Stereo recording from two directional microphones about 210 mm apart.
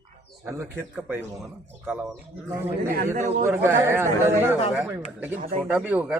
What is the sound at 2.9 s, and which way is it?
Speech, 40° right (ahead or behind).